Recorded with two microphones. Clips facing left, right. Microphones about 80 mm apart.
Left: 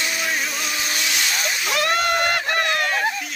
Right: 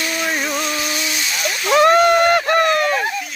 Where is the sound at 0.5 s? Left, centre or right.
Centre.